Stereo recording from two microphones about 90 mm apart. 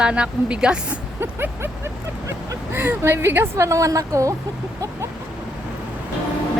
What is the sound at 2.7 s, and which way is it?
A woman's voice, 20° right (ahead or behind).